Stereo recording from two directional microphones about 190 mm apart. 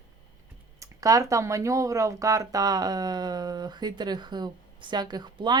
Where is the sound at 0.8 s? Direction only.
15° right (ahead or behind).